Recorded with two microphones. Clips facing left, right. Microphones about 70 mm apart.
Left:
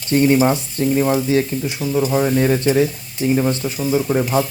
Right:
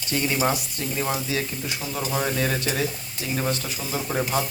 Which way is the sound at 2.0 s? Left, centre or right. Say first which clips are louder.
Left 9 dB; centre.